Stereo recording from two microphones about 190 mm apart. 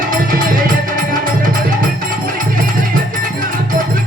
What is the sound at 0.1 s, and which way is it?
Music, 50° right (ahead or behind).